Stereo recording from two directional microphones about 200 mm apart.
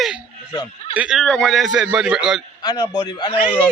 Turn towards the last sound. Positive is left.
turn(degrees=25)  # may be behind; listen again after turning